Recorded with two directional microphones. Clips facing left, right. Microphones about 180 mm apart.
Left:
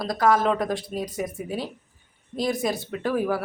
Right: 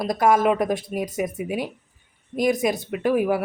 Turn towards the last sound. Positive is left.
turn(degrees=-15)  # may be behind; listen again after turning